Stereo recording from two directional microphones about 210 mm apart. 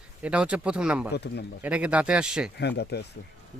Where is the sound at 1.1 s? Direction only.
50° left (ahead or behind).